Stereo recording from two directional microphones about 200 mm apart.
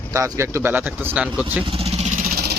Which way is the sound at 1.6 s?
30° right (ahead or behind).